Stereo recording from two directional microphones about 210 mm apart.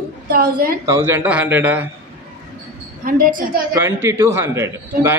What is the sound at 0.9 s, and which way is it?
A man's voice, 10° right (ahead or behind).